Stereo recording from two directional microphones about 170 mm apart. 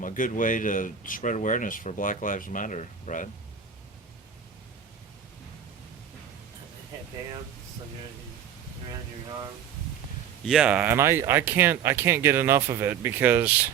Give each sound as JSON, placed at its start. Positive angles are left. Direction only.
{"t": 0.0, "sound": "speech", "side_deg": 50}
{"t": 10.4, "sound": "speech", "side_deg": -5}